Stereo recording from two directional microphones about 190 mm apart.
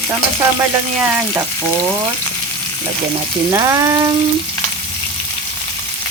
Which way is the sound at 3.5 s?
15° right (ahead or behind).